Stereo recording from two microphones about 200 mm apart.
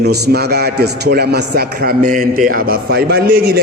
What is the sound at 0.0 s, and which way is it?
A man's voice, 50° right (ahead or behind).